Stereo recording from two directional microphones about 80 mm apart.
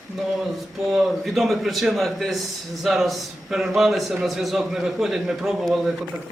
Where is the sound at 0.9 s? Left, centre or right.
Centre.